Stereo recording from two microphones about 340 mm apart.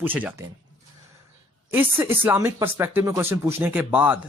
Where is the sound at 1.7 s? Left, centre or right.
Centre.